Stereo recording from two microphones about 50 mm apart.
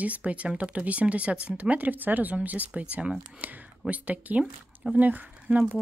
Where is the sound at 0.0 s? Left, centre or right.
Right.